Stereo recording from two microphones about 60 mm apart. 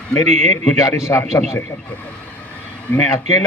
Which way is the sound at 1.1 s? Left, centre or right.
Left.